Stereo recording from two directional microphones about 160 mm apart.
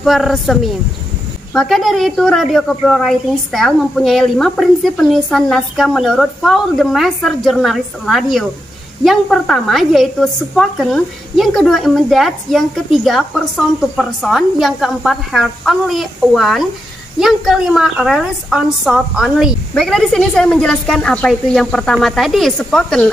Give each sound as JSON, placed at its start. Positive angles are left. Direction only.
{"t": 0.0, "sound": "a woman's voice", "side_deg": 0}